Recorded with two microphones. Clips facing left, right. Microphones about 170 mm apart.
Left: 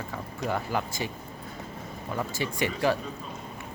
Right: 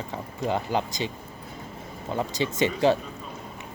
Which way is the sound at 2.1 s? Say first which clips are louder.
Right 4 dB; 20° right (ahead or behind).